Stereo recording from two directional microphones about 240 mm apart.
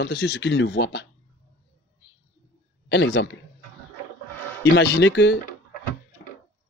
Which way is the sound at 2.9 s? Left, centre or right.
Left.